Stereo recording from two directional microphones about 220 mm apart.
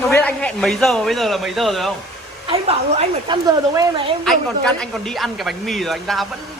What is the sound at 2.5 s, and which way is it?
Speech, 25° right (ahead or behind).